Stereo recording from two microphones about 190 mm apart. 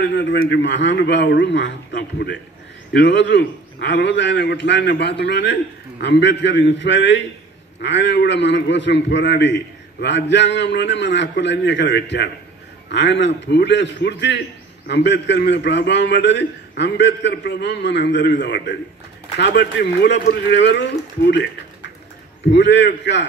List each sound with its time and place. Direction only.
0.1 s a man's voice: 65° left (ahead or behind)
22.5 s a man's voice: 65° left (ahead or behind)